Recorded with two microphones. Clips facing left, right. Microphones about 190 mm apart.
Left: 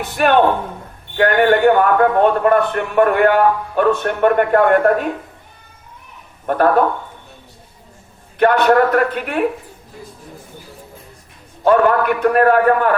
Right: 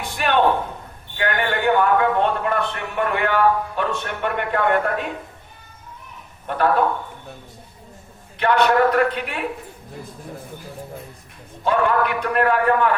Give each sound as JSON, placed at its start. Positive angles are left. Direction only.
{"t": 0.2, "sound": "a man's voice", "side_deg": 50}
{"t": 6.5, "sound": "a man's voice", "side_deg": 45}
{"t": 8.4, "sound": "a man's voice", "side_deg": 50}
{"t": 11.6, "sound": "a man's voice", "side_deg": 50}